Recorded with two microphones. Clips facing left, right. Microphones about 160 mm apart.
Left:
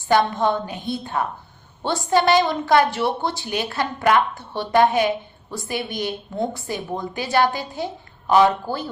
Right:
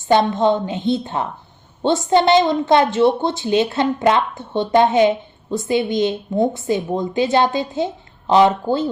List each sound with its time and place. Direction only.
0.1 s a woman's voice: 20° right (ahead or behind)